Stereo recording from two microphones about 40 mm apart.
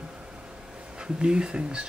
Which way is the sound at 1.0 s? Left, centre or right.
Right.